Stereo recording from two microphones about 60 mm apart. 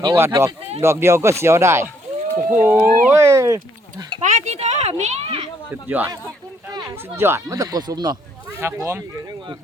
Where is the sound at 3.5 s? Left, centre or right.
Right.